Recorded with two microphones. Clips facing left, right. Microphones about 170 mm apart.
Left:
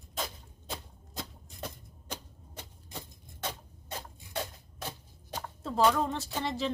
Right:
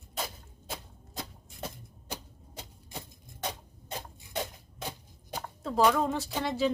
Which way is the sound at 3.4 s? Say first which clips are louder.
Right 1 dB; 20° right (ahead or behind).